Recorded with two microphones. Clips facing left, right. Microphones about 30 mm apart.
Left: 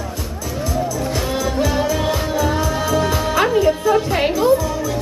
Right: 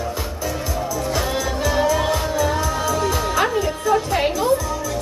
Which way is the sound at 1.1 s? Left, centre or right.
Centre.